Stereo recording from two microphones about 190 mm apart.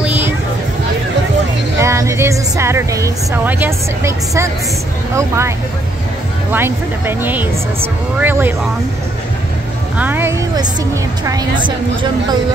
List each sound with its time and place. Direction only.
0.0 s a sound: 10° right (ahead or behind)
1.8 s speech: 15° right (ahead or behind)
6.5 s speech: 10° right (ahead or behind)
9.9 s a woman's voice: 10° right (ahead or behind)